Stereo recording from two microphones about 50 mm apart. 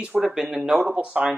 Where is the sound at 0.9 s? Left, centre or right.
Right.